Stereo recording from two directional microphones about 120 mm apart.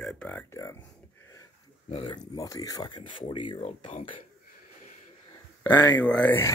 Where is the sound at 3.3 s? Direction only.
45° left (ahead or behind).